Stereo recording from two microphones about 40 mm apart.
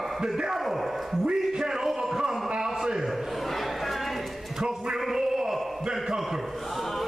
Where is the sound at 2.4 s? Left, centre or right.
Centre.